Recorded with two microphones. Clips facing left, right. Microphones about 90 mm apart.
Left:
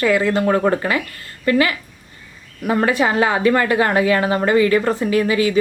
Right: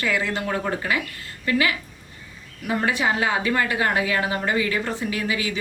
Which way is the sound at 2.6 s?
45° left (ahead or behind).